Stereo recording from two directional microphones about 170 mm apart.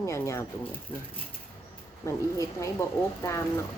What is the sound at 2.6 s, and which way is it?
A woman's voice, 15° left (ahead or behind).